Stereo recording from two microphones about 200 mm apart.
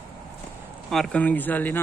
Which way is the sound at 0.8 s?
Centre (ahead or behind).